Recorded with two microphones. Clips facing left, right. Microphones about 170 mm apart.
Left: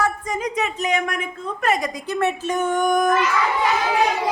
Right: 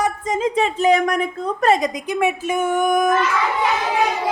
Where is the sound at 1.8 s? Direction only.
15° right (ahead or behind).